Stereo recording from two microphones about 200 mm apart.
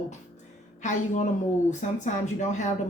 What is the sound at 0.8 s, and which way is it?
Speech, 40° left (ahead or behind).